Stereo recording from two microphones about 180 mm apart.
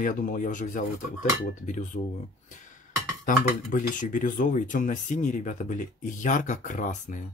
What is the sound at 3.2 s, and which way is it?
A man's voice, 45° left (ahead or behind).